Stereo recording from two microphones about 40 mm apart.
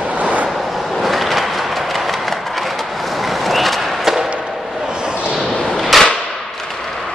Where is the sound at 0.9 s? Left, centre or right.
Centre.